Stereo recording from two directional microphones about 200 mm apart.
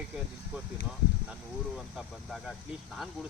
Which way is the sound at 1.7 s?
Centre (ahead or behind).